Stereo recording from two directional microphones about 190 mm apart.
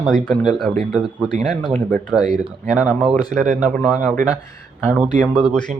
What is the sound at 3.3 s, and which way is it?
Speech, 40° right (ahead or behind).